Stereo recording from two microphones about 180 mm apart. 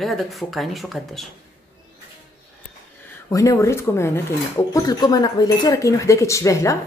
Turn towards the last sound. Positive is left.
turn(degrees=15)  # may be behind; listen again after turning